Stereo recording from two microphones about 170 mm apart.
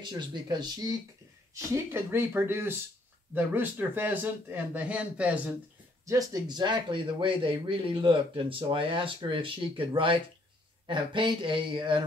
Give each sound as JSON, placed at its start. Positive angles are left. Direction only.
{"t": 0.0, "sound": "speech", "side_deg": -25}
{"t": 6.0, "sound": "speech", "side_deg": -20}